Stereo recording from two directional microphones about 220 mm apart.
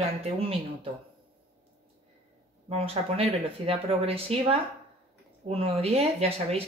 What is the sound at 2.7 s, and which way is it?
Speech, 25° right (ahead or behind).